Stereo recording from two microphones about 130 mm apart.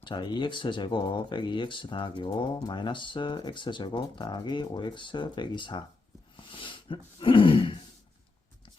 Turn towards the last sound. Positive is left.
turn(degrees=40)  # may be behind; listen again after turning